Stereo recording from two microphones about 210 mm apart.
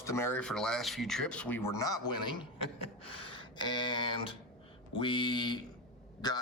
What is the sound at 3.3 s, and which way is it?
A man's voice, 20° left (ahead or behind).